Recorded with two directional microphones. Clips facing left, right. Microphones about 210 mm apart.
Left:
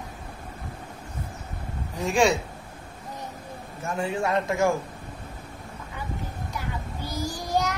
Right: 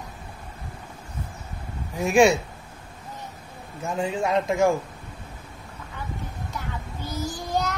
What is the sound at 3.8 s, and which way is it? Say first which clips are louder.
Speech: right 1 dB; 20° right (ahead or behind).